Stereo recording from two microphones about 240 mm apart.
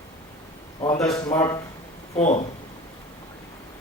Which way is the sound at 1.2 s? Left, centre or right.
Centre.